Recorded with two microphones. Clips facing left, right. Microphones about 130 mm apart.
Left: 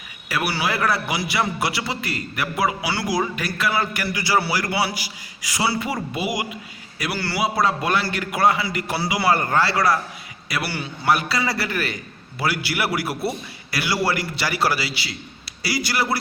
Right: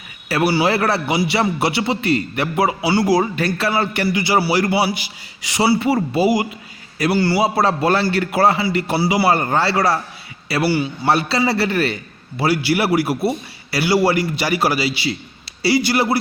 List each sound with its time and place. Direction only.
0.3 s a man's voice: 35° right (ahead or behind)